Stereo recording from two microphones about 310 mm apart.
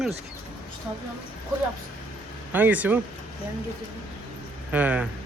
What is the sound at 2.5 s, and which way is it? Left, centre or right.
Speech, centre.